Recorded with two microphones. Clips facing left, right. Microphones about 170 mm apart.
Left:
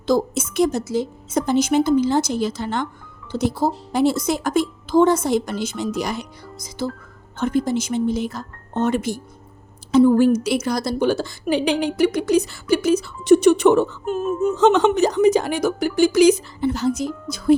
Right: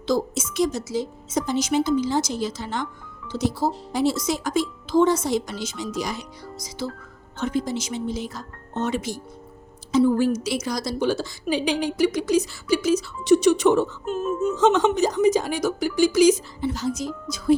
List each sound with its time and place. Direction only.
0.1 s a woman's voice: 55° left (ahead or behind)